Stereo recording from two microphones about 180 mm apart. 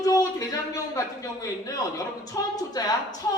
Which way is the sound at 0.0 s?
20° left (ahead or behind).